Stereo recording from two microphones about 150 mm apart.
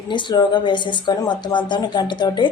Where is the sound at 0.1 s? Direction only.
30° left (ahead or behind).